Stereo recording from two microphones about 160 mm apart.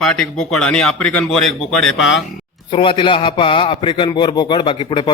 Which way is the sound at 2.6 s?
30° left (ahead or behind).